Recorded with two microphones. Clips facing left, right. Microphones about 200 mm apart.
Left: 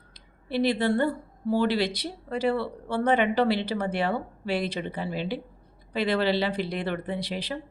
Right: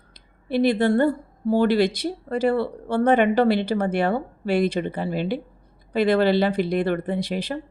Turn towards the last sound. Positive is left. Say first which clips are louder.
# right 5 dB
turn(degrees=-50)  # may be behind; listen again after turning